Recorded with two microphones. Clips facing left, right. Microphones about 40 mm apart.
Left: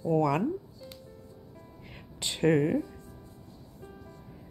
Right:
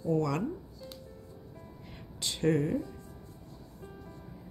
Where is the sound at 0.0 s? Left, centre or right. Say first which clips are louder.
Left 4 dB; left.